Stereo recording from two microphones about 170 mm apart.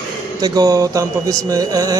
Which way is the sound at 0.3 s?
20° right (ahead or behind).